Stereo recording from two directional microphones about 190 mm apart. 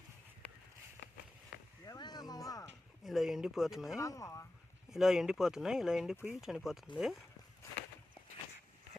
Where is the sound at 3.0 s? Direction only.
Centre (ahead or behind).